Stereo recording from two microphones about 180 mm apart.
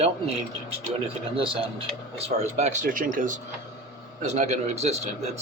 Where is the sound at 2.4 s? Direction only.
40° right (ahead or behind).